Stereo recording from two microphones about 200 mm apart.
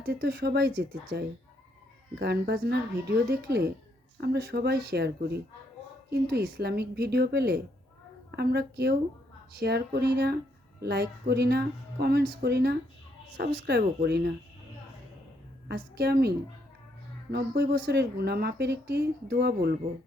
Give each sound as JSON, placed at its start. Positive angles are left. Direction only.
{"t": 0.0, "sound": "speech", "side_deg": -55}
{"t": 15.7, "sound": "speech", "side_deg": -55}
{"t": 17.3, "sound": "speech", "side_deg": -50}